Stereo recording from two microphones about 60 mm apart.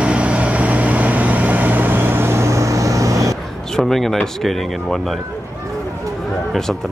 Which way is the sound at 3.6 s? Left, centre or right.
Centre.